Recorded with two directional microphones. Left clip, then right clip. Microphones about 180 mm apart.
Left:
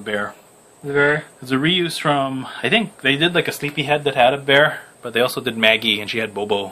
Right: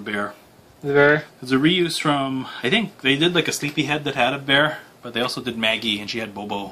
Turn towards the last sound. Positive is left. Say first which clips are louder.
# left 7 dB
turn(degrees=50)  # may be behind; listen again after turning